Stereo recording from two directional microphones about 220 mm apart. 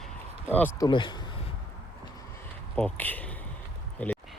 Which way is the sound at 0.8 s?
20° left (ahead or behind).